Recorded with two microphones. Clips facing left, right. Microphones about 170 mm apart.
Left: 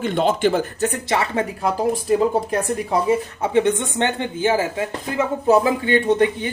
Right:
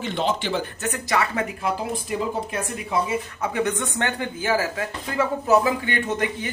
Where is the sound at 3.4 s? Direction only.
25° left (ahead or behind).